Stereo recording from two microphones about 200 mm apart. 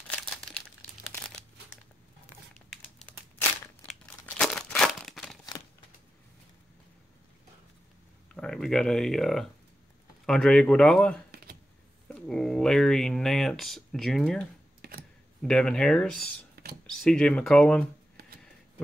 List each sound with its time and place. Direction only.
0.1 s crumpling: 5° left (ahead or behind)
2.7 s crumpling: 5° left (ahead or behind)
8.4 s speech: 5° left (ahead or behind)
14.8 s a sound: 50° right (ahead or behind)
15.4 s speech: 5° left (ahead or behind)
16.6 s a sound: 50° right (ahead or behind)
16.9 s speech: 5° left (ahead or behind)